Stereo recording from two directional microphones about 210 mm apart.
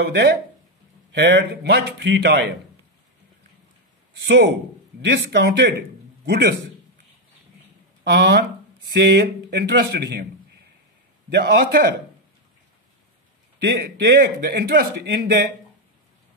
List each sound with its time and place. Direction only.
0.0 s a man's voice: 55° right (ahead or behind)
4.2 s a man's voice: 55° right (ahead or behind)
8.0 s a man's voice: 50° right (ahead or behind)
11.2 s a man's voice: 55° right (ahead or behind)
13.6 s a man's voice: 50° right (ahead or behind)